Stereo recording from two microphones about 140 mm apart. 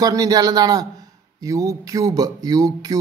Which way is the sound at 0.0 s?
25° right (ahead or behind).